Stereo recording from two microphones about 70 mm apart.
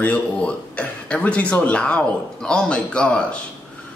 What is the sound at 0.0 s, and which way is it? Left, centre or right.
Speech, centre.